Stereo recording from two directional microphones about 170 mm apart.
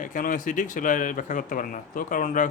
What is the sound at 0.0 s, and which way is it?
Speech, 50° left (ahead or behind).